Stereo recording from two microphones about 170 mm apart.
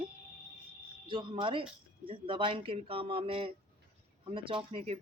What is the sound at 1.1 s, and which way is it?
Speech, 30° right (ahead or behind).